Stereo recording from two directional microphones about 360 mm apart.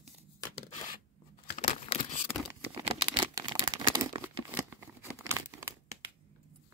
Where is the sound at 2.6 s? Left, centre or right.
Centre.